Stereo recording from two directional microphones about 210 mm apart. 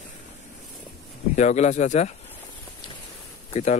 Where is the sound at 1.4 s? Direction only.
35° left (ahead or behind).